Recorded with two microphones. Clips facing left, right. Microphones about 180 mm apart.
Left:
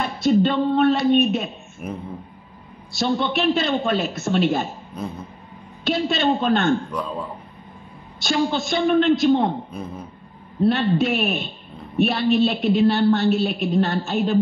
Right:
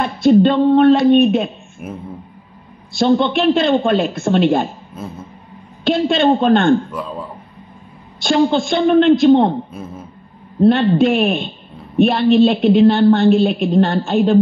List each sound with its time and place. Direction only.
0.0 s a woman's voice: 55° right (ahead or behind)
1.8 s a man's voice: 5° right (ahead or behind)
3.0 s speech: 55° right (ahead or behind)
4.9 s a man's voice: 5° right (ahead or behind)
5.9 s speech: 55° right (ahead or behind)
6.9 s a man's voice: 5° right (ahead or behind)
8.2 s speech: 55° right (ahead or behind)
9.7 s a man's voice: 5° right (ahead or behind)
10.6 s a woman's voice: 55° right (ahead or behind)